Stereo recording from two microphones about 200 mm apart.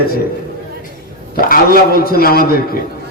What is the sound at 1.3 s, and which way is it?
A man's voice, 45° left (ahead or behind).